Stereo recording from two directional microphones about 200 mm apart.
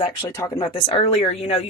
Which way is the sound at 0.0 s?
20° left (ahead or behind).